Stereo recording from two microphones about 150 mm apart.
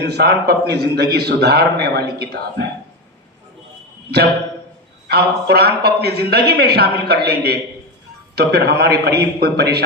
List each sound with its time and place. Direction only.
0.0 s a man's voice: 90° right
5.0 s a man's voice: 90° right